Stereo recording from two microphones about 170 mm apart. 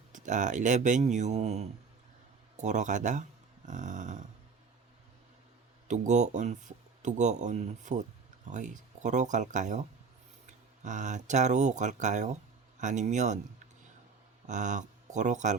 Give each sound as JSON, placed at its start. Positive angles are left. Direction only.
{"t": 0.1, "sound": "speech", "side_deg": -45}
{"t": 5.9, "sound": "speech", "side_deg": -45}
{"t": 14.4, "sound": "speech", "side_deg": -45}